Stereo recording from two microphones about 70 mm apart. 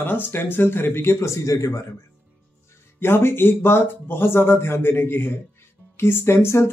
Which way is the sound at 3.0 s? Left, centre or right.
Left.